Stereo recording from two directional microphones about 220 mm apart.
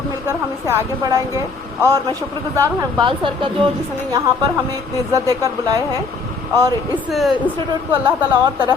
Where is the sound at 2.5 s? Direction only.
15° right (ahead or behind).